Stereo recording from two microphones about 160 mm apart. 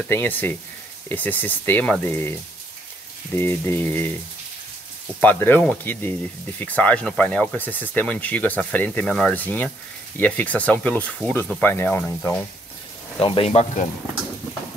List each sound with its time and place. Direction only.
0.0 s speech: 10° left (ahead or behind)
3.3 s speech: 15° left (ahead or behind)
5.2 s speech: 10° left (ahead or behind)
13.2 s speech: 35° left (ahead or behind)